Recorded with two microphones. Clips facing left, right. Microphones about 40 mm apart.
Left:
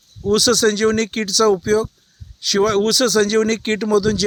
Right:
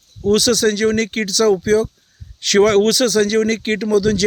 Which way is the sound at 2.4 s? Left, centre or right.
Right.